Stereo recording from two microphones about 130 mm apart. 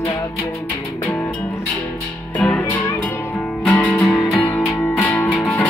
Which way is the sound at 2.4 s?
10° left (ahead or behind).